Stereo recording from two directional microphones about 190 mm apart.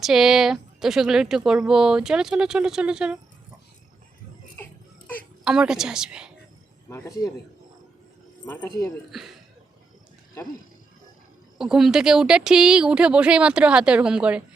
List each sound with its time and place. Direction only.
0.0 s a woman's voice: centre (ahead or behind)
4.5 s laughter: 10° left (ahead or behind)
5.5 s a woman's voice: 5° right (ahead or behind)
6.9 s speech: 15° left (ahead or behind)
8.4 s speech: 15° left (ahead or behind)
9.1 s a woman's voice: centre (ahead or behind)
11.5 s a woman's voice: 5° right (ahead or behind)